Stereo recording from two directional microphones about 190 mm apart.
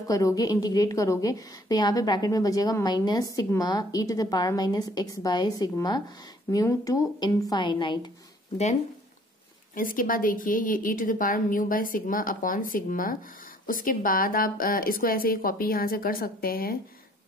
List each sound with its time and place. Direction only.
0.1 s a woman's voice: 15° left (ahead or behind)
9.8 s a woman's voice: 45° left (ahead or behind)